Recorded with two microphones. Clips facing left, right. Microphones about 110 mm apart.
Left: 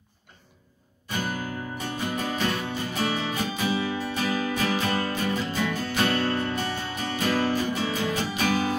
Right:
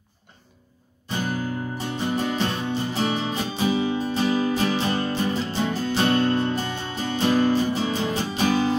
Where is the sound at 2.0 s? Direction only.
30° right (ahead or behind).